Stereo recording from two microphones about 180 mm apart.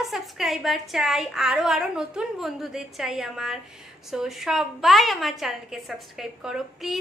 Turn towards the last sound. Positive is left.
turn(degrees=0)  # may be behind; listen again after turning